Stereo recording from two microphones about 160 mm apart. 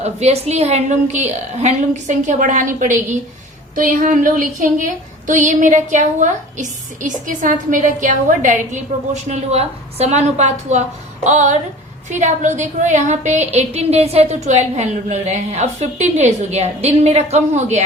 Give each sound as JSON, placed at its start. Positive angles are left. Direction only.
{"t": 0.0, "sound": "a woman's voice", "side_deg": -40}